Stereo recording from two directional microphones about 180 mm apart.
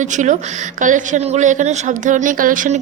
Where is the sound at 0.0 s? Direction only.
45° right (ahead or behind).